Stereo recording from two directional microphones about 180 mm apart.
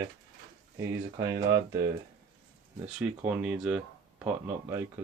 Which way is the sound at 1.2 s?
20° right (ahead or behind).